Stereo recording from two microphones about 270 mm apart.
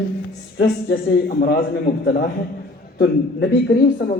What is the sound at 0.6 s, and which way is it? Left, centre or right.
A man's voice, left.